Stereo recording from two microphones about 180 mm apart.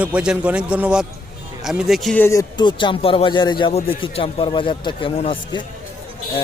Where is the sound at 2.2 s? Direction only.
15° left (ahead or behind).